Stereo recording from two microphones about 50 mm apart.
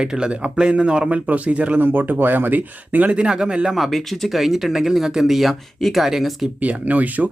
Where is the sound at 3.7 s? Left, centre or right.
Centre.